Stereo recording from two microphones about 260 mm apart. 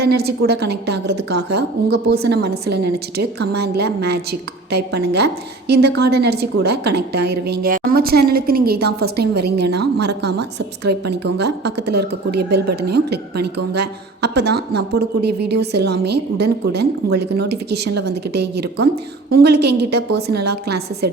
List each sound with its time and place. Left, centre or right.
0.0 s a woman's voice: right